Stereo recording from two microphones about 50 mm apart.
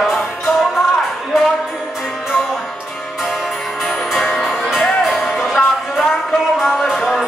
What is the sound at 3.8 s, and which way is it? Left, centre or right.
Music, centre.